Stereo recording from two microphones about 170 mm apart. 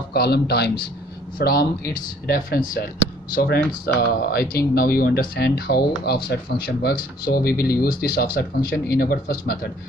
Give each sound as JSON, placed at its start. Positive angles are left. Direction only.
{"t": 0.1, "sound": "a man's voice", "side_deg": 70}
{"t": 3.8, "sound": "speech", "side_deg": 60}